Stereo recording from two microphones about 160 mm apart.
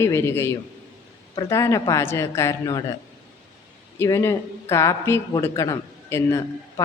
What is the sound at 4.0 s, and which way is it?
Speech, 15° left (ahead or behind).